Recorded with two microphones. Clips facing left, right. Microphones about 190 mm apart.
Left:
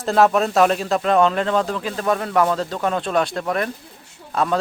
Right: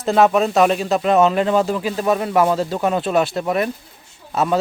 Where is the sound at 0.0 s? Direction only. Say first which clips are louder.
Right 2 dB; centre (ahead or behind).